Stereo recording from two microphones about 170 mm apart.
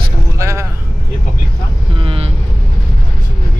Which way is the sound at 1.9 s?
30° right (ahead or behind).